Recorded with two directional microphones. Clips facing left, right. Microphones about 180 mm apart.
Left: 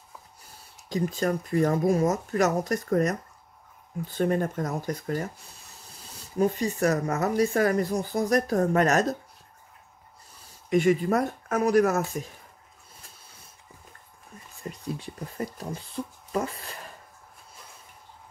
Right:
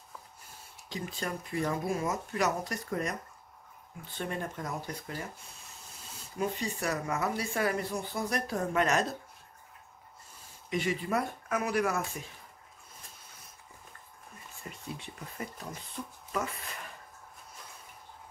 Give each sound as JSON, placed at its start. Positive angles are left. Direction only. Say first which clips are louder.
{"t": 0.8, "sound": "speech", "louder": "left 10 dB", "side_deg": 45}
{"t": 4.2, "sound": "speech", "louder": "left 10 dB", "side_deg": 45}
{"t": 10.7, "sound": "speech", "louder": "left 9 dB", "side_deg": 50}
{"t": 15.0, "sound": "speech", "louder": "left 7 dB", "side_deg": 35}